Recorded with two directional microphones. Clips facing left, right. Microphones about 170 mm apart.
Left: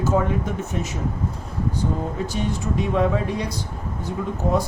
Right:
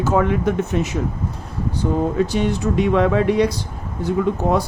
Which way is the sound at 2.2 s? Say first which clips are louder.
Right 7 dB; 80° right.